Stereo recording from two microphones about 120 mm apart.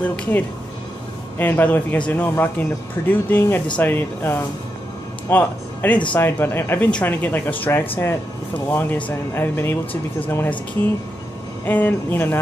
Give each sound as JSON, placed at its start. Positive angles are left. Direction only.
{"t": 0.0, "sound": "a man's voice", "side_deg": 15}
{"t": 11.6, "sound": "speech", "side_deg": 15}